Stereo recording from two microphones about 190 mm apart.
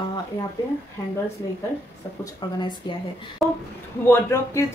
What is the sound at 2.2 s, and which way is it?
Speech, 25° left (ahead or behind).